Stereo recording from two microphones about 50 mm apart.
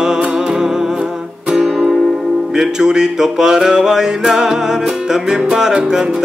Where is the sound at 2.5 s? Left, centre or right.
Centre.